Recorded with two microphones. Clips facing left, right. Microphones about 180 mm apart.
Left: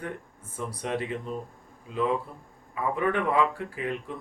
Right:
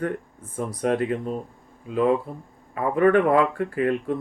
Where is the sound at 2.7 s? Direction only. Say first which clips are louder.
Right 8 dB; 55° right (ahead or behind).